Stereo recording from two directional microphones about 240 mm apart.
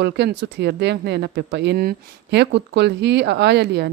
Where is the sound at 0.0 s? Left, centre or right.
Right.